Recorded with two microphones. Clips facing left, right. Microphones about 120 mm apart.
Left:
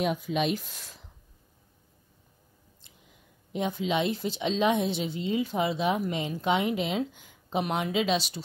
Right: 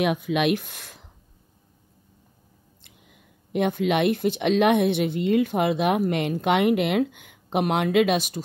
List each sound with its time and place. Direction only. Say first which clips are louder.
0.0 s speech: right 5 dB; 70° right (ahead or behind)
2.8 s speech: right 4 dB; 60° right (ahead or behind)